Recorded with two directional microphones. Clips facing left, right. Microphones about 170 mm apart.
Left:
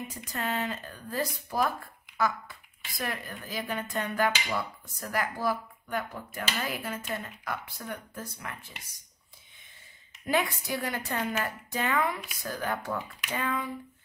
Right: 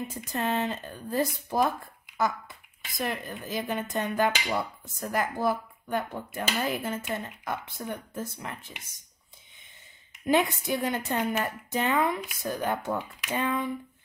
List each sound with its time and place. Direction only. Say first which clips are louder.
0.3 s speech: right 4 dB; 25° right (ahead or behind)
10.2 s speech: right 4 dB; 20° right (ahead or behind)